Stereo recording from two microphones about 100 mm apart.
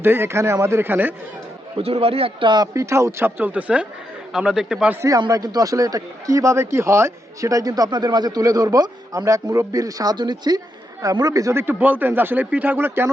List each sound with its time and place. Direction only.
0.0 s speech: 25° right (ahead or behind)
1.8 s speech: 75° right (ahead or behind)
2.7 s a man's voice: 30° right (ahead or behind); by 4.9 s 5° right (ahead or behind)
5.3 s speech: 40° right (ahead or behind); by 13.1 s 20° right (ahead or behind)